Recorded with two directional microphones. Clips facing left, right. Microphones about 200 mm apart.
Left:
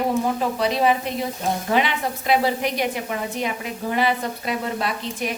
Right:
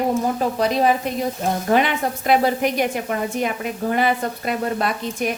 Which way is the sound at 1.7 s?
50° right (ahead or behind).